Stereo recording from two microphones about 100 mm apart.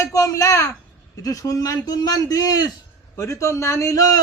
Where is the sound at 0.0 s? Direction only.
35° left (ahead or behind).